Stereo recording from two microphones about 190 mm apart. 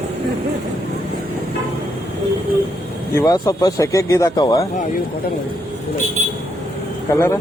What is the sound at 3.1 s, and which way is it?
Speech, 20° left (ahead or behind).